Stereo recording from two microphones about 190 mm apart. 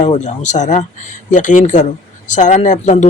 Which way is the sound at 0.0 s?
35° left (ahead or behind).